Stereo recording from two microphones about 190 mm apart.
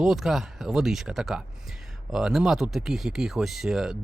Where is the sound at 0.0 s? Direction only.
Centre (ahead or behind).